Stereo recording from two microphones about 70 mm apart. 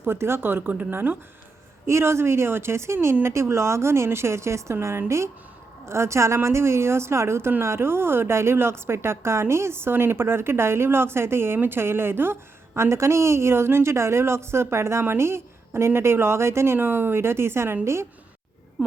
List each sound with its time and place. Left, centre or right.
0.0 s speech: right
1.9 s a woman's voice: right